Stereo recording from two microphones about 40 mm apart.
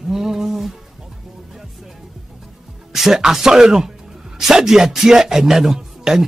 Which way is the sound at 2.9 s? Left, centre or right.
Centre.